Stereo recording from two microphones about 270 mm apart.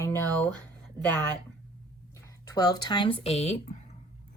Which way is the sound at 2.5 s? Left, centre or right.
Centre.